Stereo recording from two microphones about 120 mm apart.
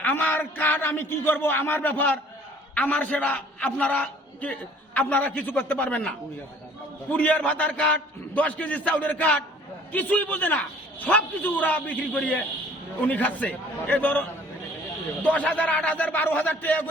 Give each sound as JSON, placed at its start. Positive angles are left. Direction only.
{"t": 0.0, "sound": "a man's voice", "side_deg": 15}